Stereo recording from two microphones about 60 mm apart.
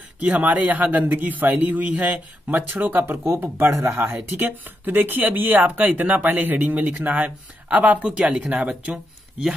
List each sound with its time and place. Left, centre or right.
0.2 s a man's voice: right
3.3 s a man's voice: right
8.9 s speech: centre